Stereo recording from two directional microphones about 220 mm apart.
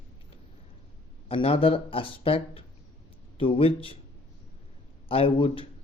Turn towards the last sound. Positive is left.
turn(degrees=25)  # may be behind; listen again after turning